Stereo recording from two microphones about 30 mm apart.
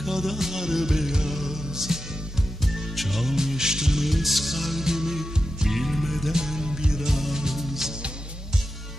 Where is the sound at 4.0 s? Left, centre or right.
Centre.